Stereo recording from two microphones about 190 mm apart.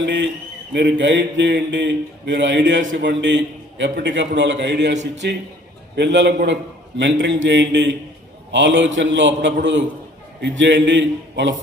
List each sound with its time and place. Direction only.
0.0 s mantra: 70° right (ahead or behind)
3.0 s a man's voice: 70° right (ahead or behind)
4.0 s mantra: 70° right (ahead or behind)